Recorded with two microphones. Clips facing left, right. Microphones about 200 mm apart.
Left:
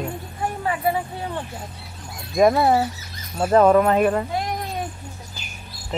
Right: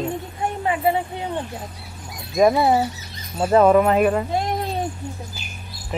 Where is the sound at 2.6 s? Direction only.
15° right (ahead or behind).